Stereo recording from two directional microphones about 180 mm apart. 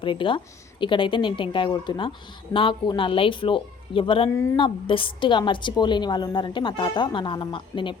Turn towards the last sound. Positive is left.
turn(degrees=25)  # may be behind; listen again after turning